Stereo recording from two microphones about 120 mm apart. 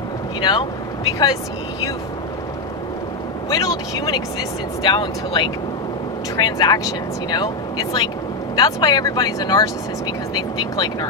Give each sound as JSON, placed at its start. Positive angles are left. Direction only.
{"t": 0.4, "sound": "speech", "side_deg": 35}
{"t": 3.4, "sound": "speech", "side_deg": 30}